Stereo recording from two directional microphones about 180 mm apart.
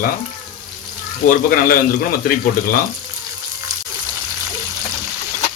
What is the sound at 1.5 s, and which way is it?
Speech, 55° left (ahead or behind).